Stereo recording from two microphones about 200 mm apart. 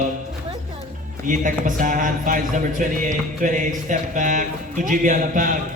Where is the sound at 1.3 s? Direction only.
40° right (ahead or behind).